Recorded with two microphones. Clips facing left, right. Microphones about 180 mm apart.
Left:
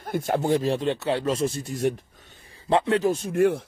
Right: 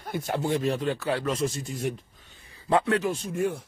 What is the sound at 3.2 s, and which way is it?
Speech, 70° left (ahead or behind).